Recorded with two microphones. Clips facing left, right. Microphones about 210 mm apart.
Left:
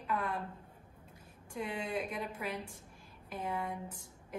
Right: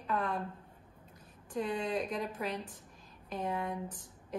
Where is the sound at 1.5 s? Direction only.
10° left (ahead or behind).